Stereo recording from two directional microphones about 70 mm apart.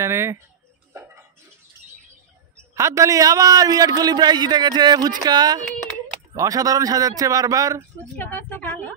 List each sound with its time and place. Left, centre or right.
0.0 s speech: right
2.7 s a man's voice: right
6.3 s a man's voice: right
8.2 s a woman's voice: left